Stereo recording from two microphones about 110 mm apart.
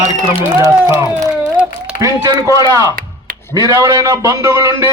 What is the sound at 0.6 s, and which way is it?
A man's voice, 30° right (ahead or behind).